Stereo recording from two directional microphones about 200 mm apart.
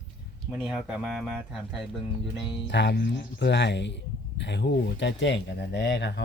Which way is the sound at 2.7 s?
60° left (ahead or behind).